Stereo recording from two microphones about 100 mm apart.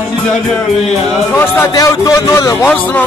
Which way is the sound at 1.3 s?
30° left (ahead or behind).